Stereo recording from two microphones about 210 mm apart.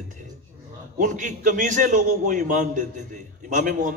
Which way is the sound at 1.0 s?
35° right (ahead or behind).